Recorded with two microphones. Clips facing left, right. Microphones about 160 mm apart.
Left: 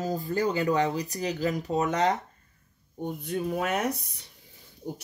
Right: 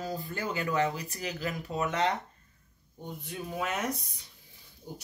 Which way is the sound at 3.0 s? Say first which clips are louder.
Left 9 dB; 55° left (ahead or behind).